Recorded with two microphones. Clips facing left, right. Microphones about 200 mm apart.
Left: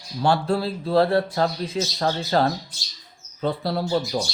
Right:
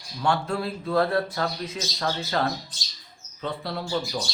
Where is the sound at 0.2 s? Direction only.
35° left (ahead or behind).